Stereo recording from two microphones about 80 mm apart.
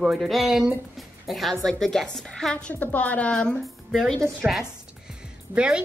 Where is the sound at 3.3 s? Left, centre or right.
Centre.